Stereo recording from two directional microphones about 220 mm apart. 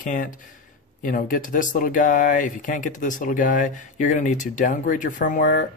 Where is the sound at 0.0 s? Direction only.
35° left (ahead or behind).